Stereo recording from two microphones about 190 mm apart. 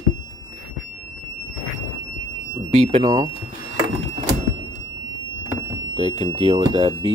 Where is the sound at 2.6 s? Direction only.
30° right (ahead or behind).